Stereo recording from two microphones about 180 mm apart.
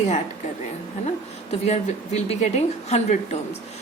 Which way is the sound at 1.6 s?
40° left (ahead or behind).